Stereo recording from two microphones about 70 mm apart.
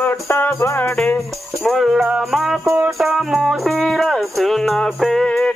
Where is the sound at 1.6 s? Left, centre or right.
Centre.